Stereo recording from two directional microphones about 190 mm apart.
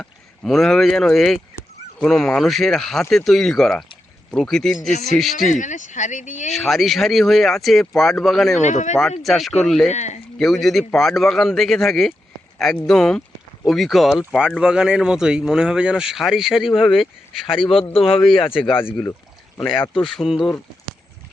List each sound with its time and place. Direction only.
0.0 s speech: centre (ahead or behind)
5.4 s speech: 40° left (ahead or behind)
6.5 s speech: centre (ahead or behind)
8.6 s speech: 40° left (ahead or behind)
9.2 s speech: centre (ahead or behind)
9.9 s speech: 35° left (ahead or behind)
10.3 s speech: centre (ahead or behind)
17.8 s a man's voice: 30° left (ahead or behind)
18.2 s speech: 5° left (ahead or behind)
19.6 s speech: 5° left (ahead or behind)